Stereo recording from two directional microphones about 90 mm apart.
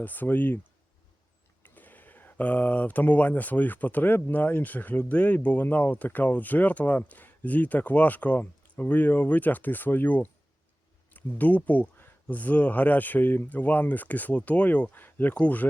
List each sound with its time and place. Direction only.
0.0 s speech: 20° left (ahead or behind)
1.6 s speech: 20° left (ahead or behind)